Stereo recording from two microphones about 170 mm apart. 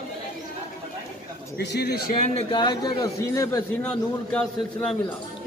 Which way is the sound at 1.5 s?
75° left (ahead or behind).